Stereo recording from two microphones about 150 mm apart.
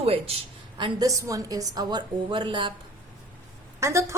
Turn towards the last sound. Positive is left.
turn(degrees=-20)  # may be behind; listen again after turning